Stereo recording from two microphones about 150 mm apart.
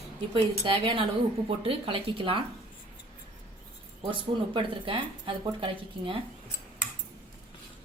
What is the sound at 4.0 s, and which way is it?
Speech, 35° right (ahead or behind).